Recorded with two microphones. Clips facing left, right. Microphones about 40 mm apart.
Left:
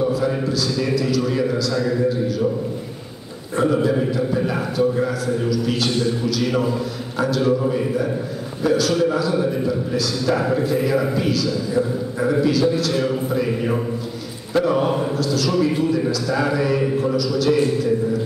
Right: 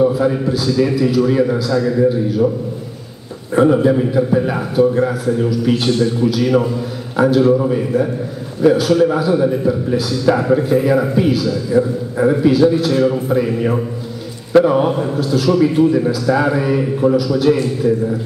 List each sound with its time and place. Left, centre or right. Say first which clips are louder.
0.0 s a sound: right 6 dB; right
0.5 s a man's voice: right 5 dB; centre
3.5 s a man's voice: right 6 dB; centre
6.4 s a man's voice: right 5 dB; centre
7.2 s a man's voice: right 7 dB; centre